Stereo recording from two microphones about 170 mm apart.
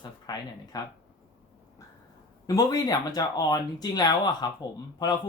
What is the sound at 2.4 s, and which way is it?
Speech, 20° left (ahead or behind).